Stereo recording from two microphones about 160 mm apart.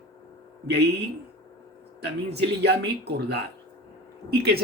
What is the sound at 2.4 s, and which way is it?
A man's voice, 90° right.